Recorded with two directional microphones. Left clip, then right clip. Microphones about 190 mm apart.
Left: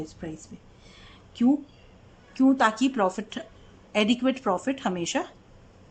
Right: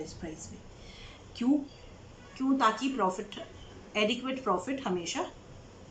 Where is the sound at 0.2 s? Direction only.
45° left (ahead or behind).